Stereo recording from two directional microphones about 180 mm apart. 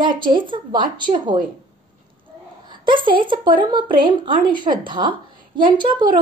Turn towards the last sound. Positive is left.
turn(degrees=-25)  # may be behind; listen again after turning